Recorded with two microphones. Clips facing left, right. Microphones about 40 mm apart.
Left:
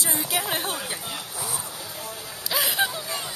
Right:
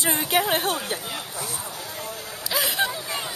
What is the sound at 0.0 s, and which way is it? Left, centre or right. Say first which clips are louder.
Speech: right 5 dB; right.